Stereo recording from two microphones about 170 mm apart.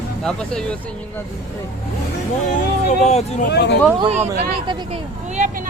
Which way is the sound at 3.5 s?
80° left.